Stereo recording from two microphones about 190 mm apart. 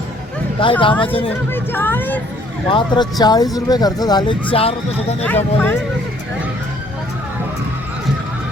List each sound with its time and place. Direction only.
0.6 s speech: 25° left (ahead or behind)
1.5 s speech: 10° left (ahead or behind)
2.6 s speech: 25° left (ahead or behind)
5.2 s speech: 10° left (ahead or behind)